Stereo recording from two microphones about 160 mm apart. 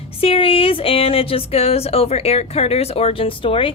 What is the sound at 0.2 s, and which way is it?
Speech, 35° left (ahead or behind).